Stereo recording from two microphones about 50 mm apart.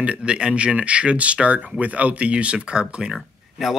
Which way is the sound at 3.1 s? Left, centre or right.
Centre.